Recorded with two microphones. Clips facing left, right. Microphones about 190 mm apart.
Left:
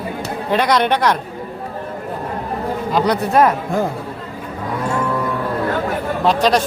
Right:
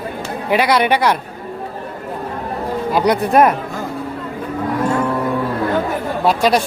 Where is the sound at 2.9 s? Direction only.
15° right (ahead or behind).